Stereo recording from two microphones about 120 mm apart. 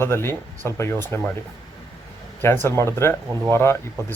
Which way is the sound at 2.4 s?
20° left (ahead or behind).